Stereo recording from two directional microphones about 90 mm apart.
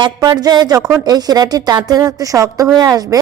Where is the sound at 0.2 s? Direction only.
50° right (ahead or behind).